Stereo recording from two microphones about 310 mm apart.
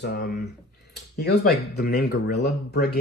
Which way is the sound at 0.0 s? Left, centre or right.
Left.